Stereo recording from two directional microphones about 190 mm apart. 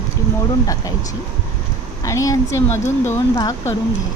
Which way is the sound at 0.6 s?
15° left (ahead or behind).